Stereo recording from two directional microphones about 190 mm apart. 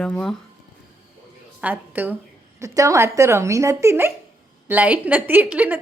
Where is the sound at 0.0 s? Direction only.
5° left (ahead or behind).